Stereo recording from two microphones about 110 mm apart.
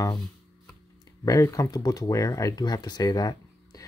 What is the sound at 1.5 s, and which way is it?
Speech, 35° left (ahead or behind).